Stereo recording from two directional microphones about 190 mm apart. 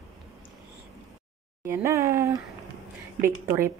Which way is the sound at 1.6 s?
15° right (ahead or behind).